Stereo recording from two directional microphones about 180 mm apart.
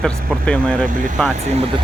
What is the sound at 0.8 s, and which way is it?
Speech, 50° right (ahead or behind).